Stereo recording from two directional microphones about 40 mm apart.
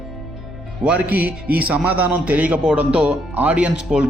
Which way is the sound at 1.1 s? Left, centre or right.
Right.